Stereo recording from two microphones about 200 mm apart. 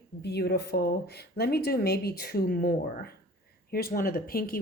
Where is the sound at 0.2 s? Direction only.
55° left (ahead or behind).